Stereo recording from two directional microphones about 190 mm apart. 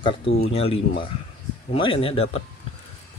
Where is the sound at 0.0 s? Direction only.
30° left (ahead or behind).